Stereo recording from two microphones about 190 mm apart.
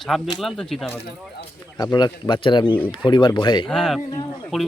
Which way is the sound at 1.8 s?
20° left (ahead or behind).